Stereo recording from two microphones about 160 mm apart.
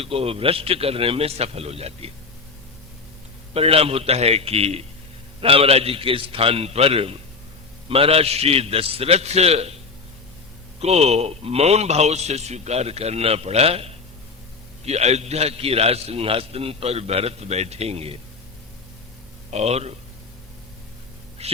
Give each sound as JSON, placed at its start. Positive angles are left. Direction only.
{"t": 0.0, "sound": "a man's voice", "side_deg": -35}
{"t": 3.5, "sound": "a man's voice", "side_deg": -40}
{"t": 10.8, "sound": "a man's voice", "side_deg": -40}
{"t": 19.5, "sound": "a man's voice", "side_deg": -40}
{"t": 21.4, "sound": "speech", "side_deg": -40}